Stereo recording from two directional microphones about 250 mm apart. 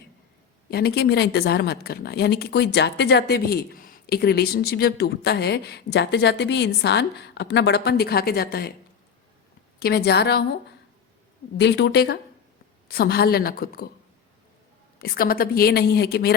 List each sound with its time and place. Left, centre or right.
0.7 s a woman's voice: left
9.8 s a woman's voice: left
11.5 s a woman's voice: left
14.9 s a woman's voice: left